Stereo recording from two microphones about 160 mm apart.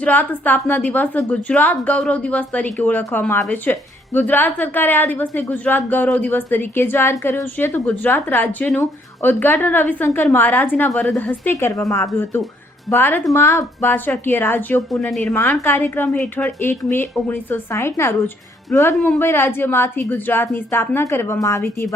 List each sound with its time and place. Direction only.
0.0 s a woman's voice: 10° left (ahead or behind)
14.8 s speech: centre (ahead or behind)
15.3 s a woman's voice: 10° left (ahead or behind)